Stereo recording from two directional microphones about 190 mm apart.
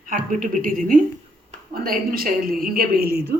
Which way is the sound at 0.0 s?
45° right (ahead or behind).